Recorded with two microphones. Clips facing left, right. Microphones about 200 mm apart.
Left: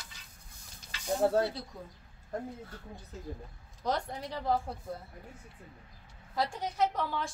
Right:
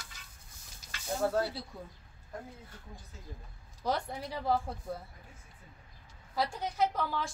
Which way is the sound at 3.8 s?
5° right (ahead or behind).